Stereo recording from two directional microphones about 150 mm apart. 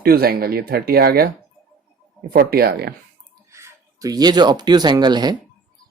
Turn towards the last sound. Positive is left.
turn(degrees=-30)  # may be behind; listen again after turning